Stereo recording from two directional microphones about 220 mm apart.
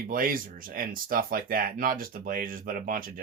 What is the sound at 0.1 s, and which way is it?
Speech, 40° right (ahead or behind).